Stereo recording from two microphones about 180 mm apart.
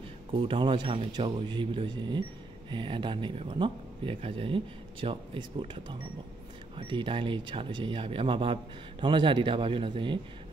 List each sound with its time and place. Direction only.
0.3 s speech: 30° right (ahead or behind)